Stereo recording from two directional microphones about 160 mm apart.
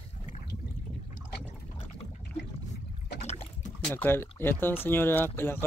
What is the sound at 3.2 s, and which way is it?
Boat, 40° left (ahead or behind).